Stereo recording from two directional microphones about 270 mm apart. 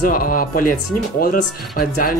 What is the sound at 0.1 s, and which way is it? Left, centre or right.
Speech, left.